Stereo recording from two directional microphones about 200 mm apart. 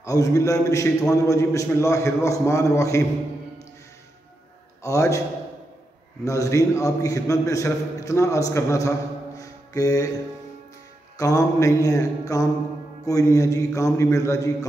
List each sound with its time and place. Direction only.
0.0 s a man's voice: 15° left (ahead or behind)
4.8 s a man's voice: 15° left (ahead or behind)
6.2 s a man's voice: 15° left (ahead or behind)
9.4 s music: 15° left (ahead or behind)
11.1 s a man's voice: 15° left (ahead or behind)